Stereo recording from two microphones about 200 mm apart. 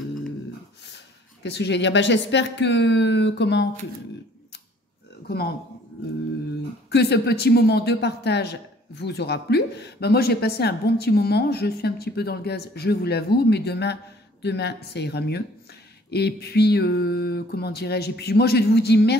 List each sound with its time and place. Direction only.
1.4 s a woman's voice: 60° left (ahead or behind)
6.9 s a woman's voice: 55° left (ahead or behind)
16.1 s a sound: 55° left (ahead or behind)